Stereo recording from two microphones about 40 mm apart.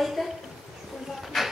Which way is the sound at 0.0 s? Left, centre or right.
Centre.